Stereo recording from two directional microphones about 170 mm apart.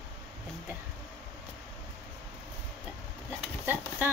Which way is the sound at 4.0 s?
10° right (ahead or behind).